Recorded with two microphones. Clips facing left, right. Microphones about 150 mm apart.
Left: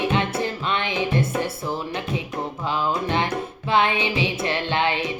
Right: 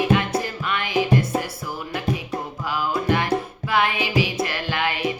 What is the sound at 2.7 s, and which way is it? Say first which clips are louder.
Music: right 2 dB; 25° left (ahead or behind).